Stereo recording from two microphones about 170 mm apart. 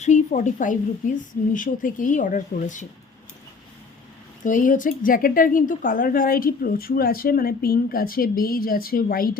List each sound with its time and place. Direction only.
0.0 s a woman's voice: 45° left (ahead or behind)
4.4 s a woman's voice: 50° left (ahead or behind)